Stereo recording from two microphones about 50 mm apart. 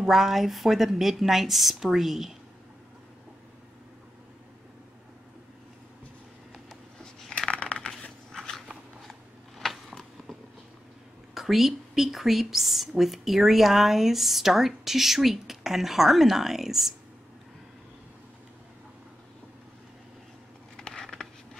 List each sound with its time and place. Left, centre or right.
0.0 s speech: centre
7.3 s a sound: left
8.3 s dog: centre
9.6 s a sound: centre
11.3 s speech: centre
20.7 s patter: centre